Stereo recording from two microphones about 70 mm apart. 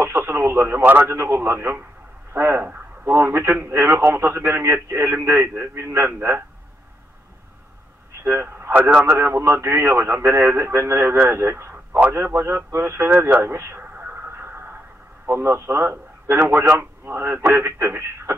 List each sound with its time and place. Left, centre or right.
0.0 s a man's voice: right
8.2 s a man's voice: right
13.9 s radio: right
14.3 s a sound: right
15.2 s a man's voice: right